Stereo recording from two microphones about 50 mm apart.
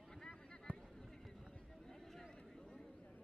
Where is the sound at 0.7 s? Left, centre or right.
Right.